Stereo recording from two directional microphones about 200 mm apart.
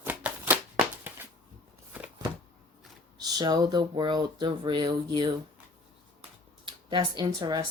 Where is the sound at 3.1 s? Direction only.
20° right (ahead or behind).